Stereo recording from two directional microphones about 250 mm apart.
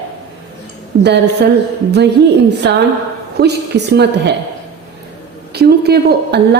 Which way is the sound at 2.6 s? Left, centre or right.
Right.